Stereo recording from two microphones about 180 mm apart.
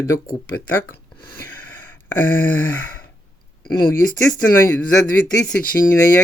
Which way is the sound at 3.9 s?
15° left (ahead or behind).